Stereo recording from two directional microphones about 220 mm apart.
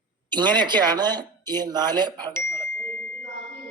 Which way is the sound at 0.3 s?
20° right (ahead or behind).